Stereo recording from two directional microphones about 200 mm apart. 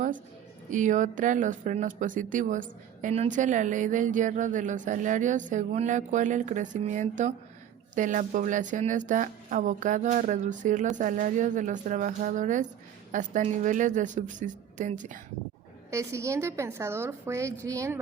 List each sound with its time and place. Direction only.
0.7 s speech: 40° right (ahead or behind)
15.9 s a woman's voice: 15° right (ahead or behind)